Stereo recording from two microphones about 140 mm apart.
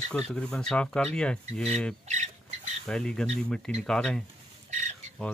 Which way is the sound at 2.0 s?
55° right (ahead or behind).